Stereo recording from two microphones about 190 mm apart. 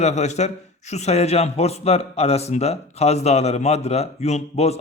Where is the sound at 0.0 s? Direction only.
35° left (ahead or behind).